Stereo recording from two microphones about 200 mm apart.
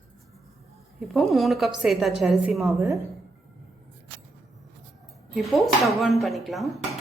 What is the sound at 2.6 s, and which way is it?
Speech, 15° right (ahead or behind).